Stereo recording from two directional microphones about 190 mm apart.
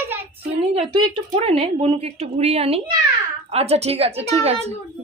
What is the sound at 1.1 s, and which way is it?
A woman's voice, 30° right (ahead or behind).